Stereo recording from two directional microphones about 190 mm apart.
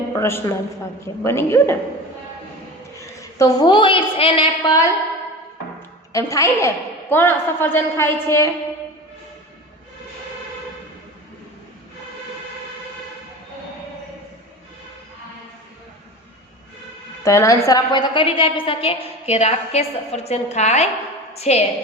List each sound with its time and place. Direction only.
0.1 s a man's voice: 15° left (ahead or behind)
3.0 s a woman's voice: 15° left (ahead or behind)
6.1 s a woman's voice: 15° left (ahead or behind)
17.2 s a woman's voice: 15° left (ahead or behind); by 21.6 s 35° left (ahead or behind)